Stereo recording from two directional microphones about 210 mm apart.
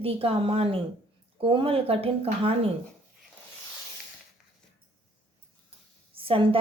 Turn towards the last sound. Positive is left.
turn(degrees=-25)  # may be behind; listen again after turning